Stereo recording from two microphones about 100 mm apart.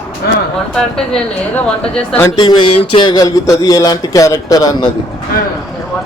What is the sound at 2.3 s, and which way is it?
A man's voice, 50° left (ahead or behind).